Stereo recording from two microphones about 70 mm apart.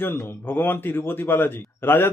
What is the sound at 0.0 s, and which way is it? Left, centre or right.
Speech, left.